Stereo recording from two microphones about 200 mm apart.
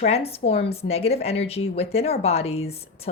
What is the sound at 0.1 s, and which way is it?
A woman's voice, 30° left (ahead or behind).